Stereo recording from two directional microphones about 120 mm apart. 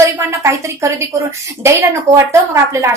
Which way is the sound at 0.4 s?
25° right (ahead or behind).